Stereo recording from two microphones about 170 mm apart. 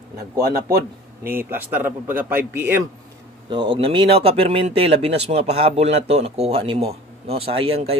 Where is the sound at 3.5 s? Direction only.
30° right (ahead or behind).